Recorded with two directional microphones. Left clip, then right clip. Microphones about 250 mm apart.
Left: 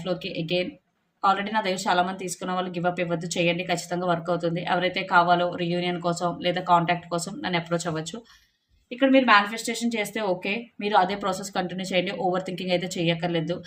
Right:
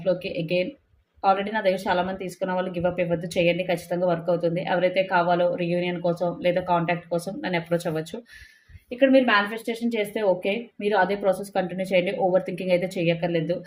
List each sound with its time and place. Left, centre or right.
0.0 s a woman's voice: centre